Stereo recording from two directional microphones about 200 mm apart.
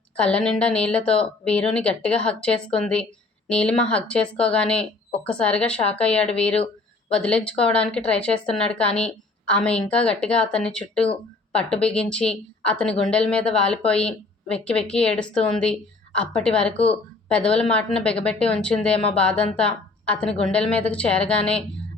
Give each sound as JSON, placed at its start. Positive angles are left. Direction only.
{"t": 0.2, "sound": "a woman's voice", "side_deg": 5}
{"t": 5.7, "sound": "speech", "side_deg": 30}
{"t": 6.0, "sound": "a woman's voice", "side_deg": 5}